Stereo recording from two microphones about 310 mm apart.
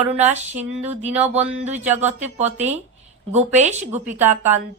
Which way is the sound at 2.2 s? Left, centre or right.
Right.